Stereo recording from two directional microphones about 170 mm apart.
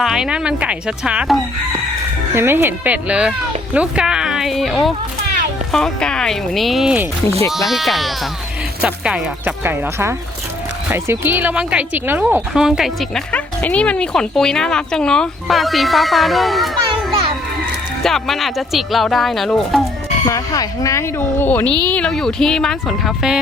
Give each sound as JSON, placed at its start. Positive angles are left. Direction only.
{"t": 0.0, "sound": "speech", "side_deg": -5}
{"t": 20.2, "sound": "speech", "side_deg": 20}